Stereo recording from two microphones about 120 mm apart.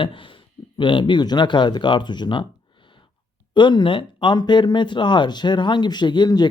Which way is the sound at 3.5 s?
40° left (ahead or behind).